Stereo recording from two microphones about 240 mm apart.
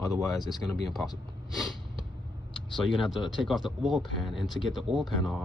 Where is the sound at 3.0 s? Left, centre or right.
Centre.